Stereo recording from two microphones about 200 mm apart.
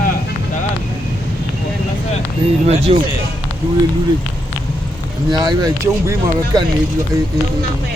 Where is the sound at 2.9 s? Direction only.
30° right (ahead or behind).